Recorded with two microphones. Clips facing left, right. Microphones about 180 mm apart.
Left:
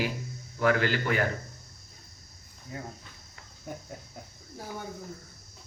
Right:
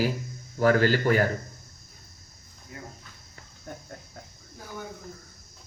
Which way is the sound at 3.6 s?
10° left (ahead or behind).